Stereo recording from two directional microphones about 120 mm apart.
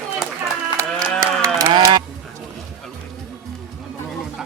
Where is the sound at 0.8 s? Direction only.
25° right (ahead or behind).